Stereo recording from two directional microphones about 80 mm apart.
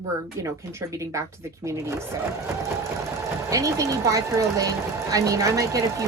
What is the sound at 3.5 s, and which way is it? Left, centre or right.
Speech, right.